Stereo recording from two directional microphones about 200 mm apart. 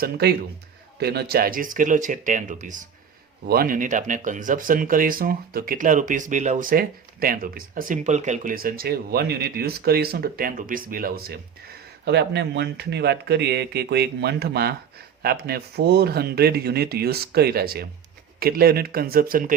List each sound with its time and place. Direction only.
0.0 s speech: 55° right (ahead or behind)
3.4 s speech: 50° right (ahead or behind)